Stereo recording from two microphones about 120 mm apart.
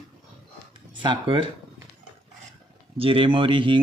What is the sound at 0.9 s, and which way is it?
Speech, 45° right (ahead or behind).